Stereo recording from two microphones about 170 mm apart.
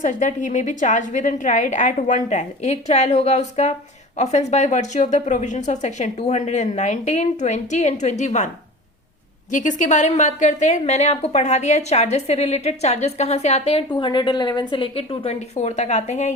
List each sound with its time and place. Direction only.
0.0 s a woman's voice: 45° left (ahead or behind)
9.5 s a woman's voice: 50° left (ahead or behind)